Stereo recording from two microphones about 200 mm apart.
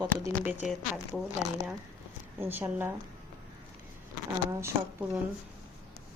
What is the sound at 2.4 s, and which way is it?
Speech, 10° right (ahead or behind).